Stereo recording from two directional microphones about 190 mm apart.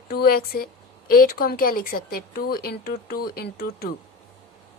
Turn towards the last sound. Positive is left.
turn(degrees=55)  # may be behind; listen again after turning